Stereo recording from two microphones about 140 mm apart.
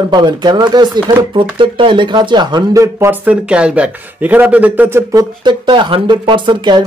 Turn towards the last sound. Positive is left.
turn(degrees=-35)  # may be behind; listen again after turning